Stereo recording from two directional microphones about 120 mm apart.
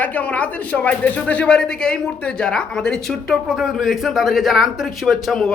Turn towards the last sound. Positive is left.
turn(degrees=0)  # may be behind; listen again after turning